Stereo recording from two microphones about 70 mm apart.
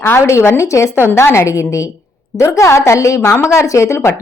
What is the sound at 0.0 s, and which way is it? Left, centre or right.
Speech, left.